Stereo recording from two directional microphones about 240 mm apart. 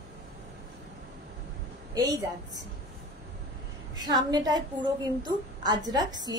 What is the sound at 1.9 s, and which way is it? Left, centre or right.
Speech, centre.